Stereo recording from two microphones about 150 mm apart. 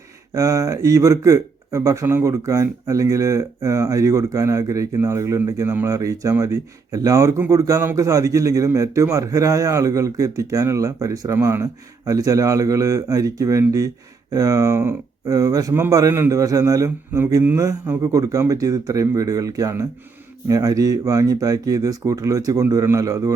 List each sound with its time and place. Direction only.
0.3 s speech: 20° right (ahead or behind)